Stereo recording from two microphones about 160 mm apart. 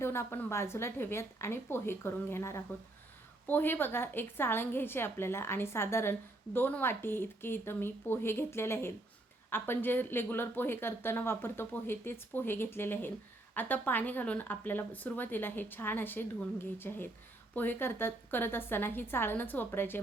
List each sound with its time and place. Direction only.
0.0 s a woman's voice: 15° left (ahead or behind)